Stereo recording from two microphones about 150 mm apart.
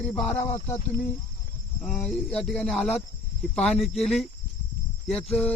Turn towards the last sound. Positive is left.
turn(degrees=5)  # may be behind; listen again after turning